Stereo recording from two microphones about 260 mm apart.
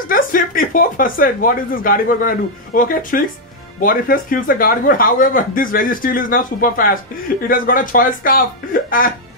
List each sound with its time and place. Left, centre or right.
0.1 s speech: left